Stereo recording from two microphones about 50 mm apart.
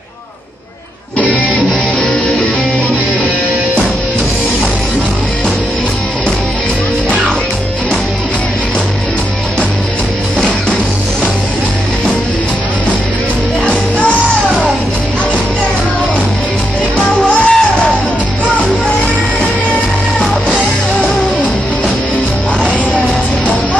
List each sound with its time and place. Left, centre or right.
13.7 s music: left
17.2 s music: centre
22.7 s music: left